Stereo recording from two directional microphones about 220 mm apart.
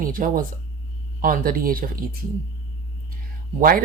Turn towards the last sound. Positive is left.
turn(degrees=-40)  # may be behind; listen again after turning